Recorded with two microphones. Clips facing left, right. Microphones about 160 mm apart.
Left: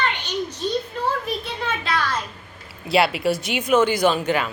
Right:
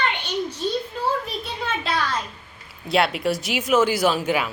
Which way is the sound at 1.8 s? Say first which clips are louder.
Even; centre (ahead or behind).